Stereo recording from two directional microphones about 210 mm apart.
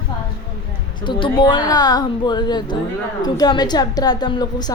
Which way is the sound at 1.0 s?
25° left (ahead or behind).